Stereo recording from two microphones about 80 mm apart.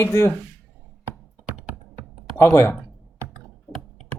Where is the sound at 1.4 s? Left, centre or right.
Centre.